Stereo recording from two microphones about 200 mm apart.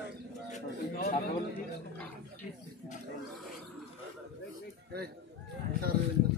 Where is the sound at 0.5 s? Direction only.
45° left (ahead or behind).